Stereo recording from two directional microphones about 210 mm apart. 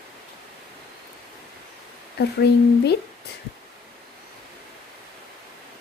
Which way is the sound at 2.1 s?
50° left (ahead or behind).